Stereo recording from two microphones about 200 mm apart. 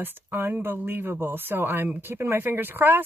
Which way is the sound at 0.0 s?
10° right (ahead or behind).